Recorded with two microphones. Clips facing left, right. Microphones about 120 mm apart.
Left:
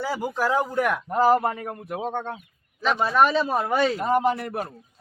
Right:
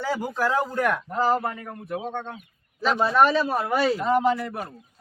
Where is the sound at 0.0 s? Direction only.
15° left (ahead or behind).